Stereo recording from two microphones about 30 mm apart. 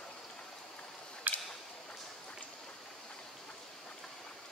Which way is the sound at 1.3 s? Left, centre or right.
Right.